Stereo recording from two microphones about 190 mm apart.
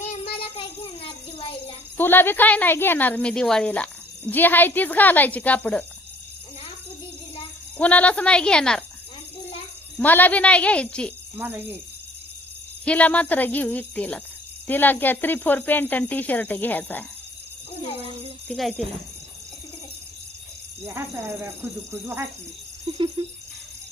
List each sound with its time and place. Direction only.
0.3 s child singing: 30° left (ahead or behind)
2.0 s speech: 10° left (ahead or behind)
7.8 s speech: 5° left (ahead or behind)
10.0 s speech: 10° left (ahead or behind)
11.3 s speech: 10° right (ahead or behind)
12.8 s speech: 5° left (ahead or behind)
18.4 s speech: centre (ahead or behind)
22.0 s speech: 15° right (ahead or behind)
22.9 s a sound: 25° right (ahead or behind)